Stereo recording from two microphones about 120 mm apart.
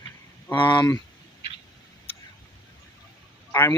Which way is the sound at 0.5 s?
40° left (ahead or behind).